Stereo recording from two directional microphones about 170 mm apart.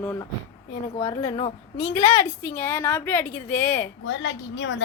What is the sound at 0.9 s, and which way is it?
Speech, 25° left (ahead or behind).